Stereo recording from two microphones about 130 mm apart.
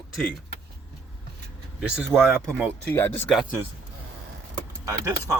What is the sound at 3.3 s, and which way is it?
Speech, 5° right (ahead or behind).